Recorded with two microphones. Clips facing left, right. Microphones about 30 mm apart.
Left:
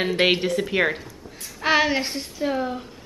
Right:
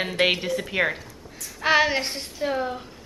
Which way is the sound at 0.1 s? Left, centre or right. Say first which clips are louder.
Left 1 dB; centre.